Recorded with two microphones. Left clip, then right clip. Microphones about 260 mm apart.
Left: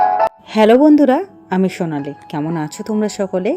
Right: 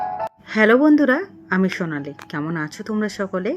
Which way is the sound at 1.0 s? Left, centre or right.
Centre.